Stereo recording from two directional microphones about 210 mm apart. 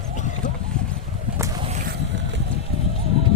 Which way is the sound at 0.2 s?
35° left (ahead or behind).